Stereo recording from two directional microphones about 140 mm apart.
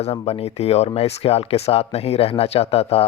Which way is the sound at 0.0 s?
50° left (ahead or behind).